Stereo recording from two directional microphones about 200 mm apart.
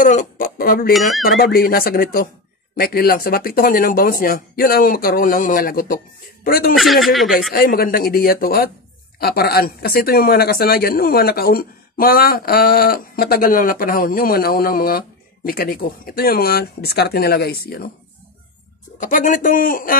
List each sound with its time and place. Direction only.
0.0 s speech: 40° left (ahead or behind)
6.7 s speech: centre (ahead or behind)
7.5 s speech: 45° left (ahead or behind)
18.9 s speech: 40° left (ahead or behind)